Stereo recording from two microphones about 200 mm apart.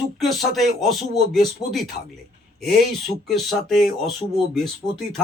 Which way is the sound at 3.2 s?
Centre (ahead or behind).